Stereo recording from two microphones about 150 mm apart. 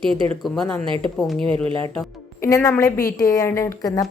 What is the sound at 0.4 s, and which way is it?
Speech, centre (ahead or behind).